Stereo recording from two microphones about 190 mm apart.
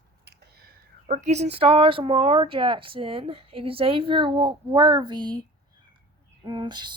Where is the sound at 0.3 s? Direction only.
55° right (ahead or behind).